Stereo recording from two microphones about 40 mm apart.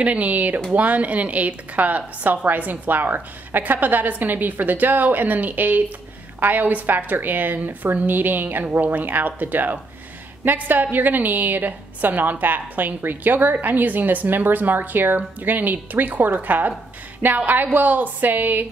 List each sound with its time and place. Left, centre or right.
0.0 s a woman's voice: right